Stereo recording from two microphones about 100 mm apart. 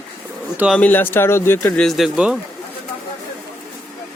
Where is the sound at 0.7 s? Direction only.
15° left (ahead or behind).